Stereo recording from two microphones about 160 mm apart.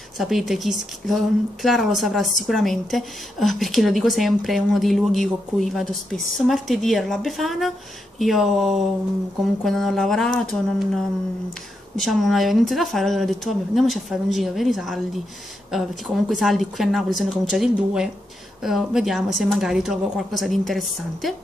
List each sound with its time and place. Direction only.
0.2 s a woman's voice: centre (ahead or behind)
16.3 s a woman's voice: centre (ahead or behind)